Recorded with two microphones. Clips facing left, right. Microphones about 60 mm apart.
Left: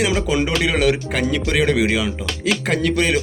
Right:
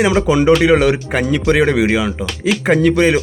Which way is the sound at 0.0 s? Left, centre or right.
Right.